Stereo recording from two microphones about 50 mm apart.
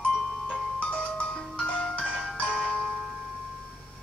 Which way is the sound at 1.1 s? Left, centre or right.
Left.